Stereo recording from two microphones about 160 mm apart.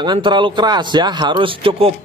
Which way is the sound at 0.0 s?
30° right (ahead or behind).